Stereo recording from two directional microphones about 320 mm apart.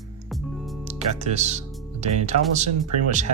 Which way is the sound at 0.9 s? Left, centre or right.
Right.